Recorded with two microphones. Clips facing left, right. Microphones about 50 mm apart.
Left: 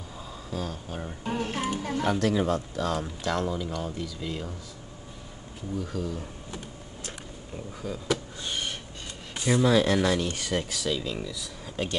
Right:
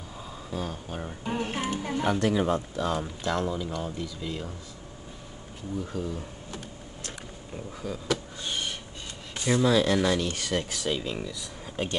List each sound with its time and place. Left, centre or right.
0.5 s speech: centre
5.8 s speech: right
6.5 s printer: centre
7.5 s speech: centre
9.4 s speech: centre
10.7 s speech: right
11.1 s speech: centre